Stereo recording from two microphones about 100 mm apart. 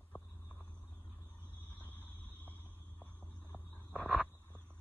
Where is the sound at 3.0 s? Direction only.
15° left (ahead or behind).